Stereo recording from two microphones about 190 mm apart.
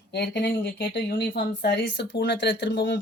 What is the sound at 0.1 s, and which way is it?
Speech, 65° left (ahead or behind).